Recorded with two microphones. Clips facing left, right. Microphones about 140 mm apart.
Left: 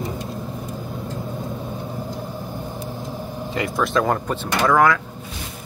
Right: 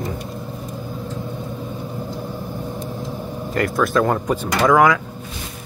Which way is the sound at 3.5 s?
Centre (ahead or behind).